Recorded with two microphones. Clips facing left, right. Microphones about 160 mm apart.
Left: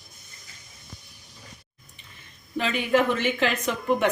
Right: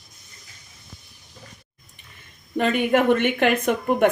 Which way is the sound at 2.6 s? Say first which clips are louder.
Right 3 dB; 55° right (ahead or behind).